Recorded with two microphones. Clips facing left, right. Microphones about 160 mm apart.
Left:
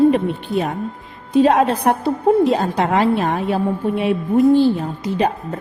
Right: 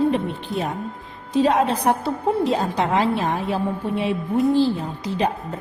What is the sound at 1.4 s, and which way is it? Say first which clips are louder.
A woman's voice: left 2 dB; 65° left (ahead or behind).